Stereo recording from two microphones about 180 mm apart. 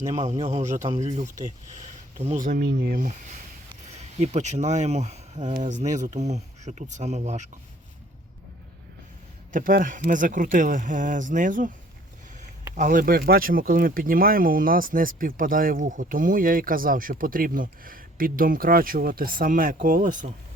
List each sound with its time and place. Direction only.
0.2 s speech: 35° right (ahead or behind)
4.2 s speech: 40° right (ahead or behind)
9.5 s speech: 50° right (ahead or behind)
12.7 s speech: 45° right (ahead or behind)